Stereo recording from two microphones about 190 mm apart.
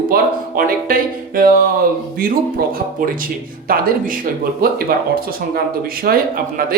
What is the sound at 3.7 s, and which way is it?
Speech, 50° right (ahead or behind).